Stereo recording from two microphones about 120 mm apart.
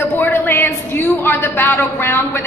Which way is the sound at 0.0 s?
15° left (ahead or behind).